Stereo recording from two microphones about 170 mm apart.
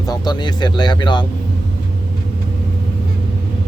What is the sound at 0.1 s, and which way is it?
Speech, 25° left (ahead or behind).